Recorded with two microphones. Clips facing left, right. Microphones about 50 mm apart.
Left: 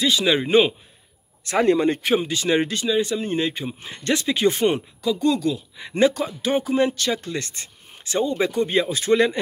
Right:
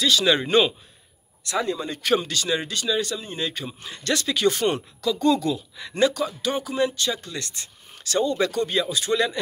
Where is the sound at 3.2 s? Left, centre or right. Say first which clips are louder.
Left 6 dB; left.